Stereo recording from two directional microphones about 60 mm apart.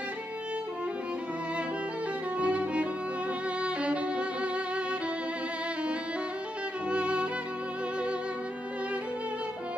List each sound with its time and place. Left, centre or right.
2.3 s music: right
6.9 s music: centre